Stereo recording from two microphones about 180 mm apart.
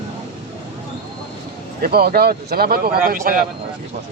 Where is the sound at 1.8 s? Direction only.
60° right (ahead or behind).